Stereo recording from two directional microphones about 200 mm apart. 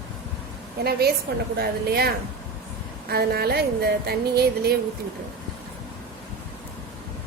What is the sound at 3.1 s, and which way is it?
A woman's voice, 50° right (ahead or behind).